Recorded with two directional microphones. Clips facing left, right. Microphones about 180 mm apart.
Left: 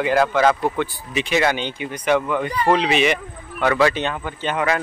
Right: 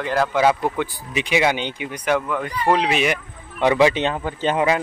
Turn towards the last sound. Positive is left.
turn(degrees=-30)  # may be behind; listen again after turning